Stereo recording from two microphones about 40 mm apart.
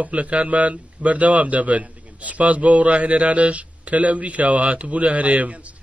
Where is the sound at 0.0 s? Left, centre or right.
Right.